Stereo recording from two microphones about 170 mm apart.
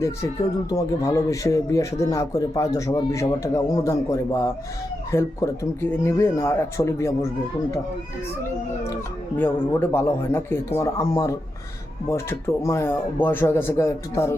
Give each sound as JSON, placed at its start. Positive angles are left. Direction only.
{"t": 0.7, "sound": "speech", "side_deg": 20}
{"t": 9.4, "sound": "speech", "side_deg": 15}